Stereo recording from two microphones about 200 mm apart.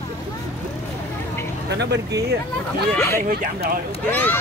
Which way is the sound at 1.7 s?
55° right (ahead or behind).